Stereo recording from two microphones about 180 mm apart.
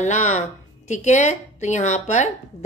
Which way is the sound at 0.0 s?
40° left (ahead or behind).